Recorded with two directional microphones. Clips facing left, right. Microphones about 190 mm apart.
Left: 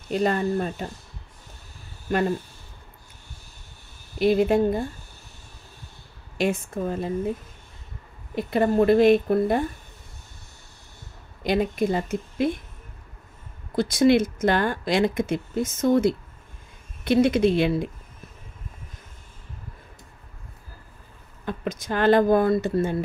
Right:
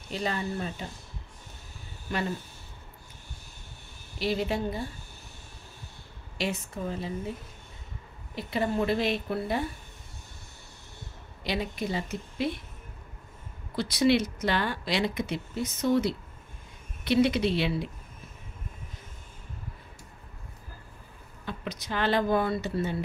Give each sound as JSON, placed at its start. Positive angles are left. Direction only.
{"t": 0.1, "sound": "speech", "side_deg": 50}
{"t": 2.0, "sound": "speech", "side_deg": 50}
{"t": 4.2, "sound": "speech", "side_deg": 50}
{"t": 6.3, "sound": "speech", "side_deg": 50}
{"t": 8.4, "sound": "speech", "side_deg": 50}
{"t": 11.4, "sound": "speech", "side_deg": 50}
{"t": 13.7, "sound": "speech", "side_deg": 50}
{"t": 21.5, "sound": "speech", "side_deg": 50}